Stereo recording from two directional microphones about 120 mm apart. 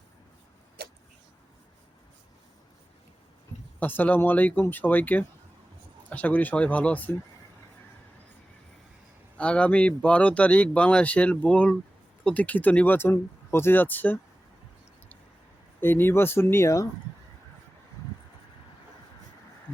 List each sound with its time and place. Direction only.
3.8 s speech: 15° left (ahead or behind)
9.4 s speech: 10° left (ahead or behind)
15.8 s speech: 20° left (ahead or behind)